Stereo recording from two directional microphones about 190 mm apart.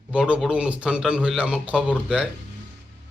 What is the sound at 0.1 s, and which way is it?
A man's voice, 5° right (ahead or behind).